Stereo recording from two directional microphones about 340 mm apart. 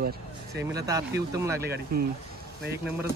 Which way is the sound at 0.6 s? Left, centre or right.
Centre.